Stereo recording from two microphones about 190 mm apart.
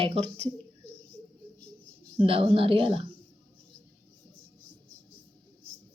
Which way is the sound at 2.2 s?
30° right (ahead or behind).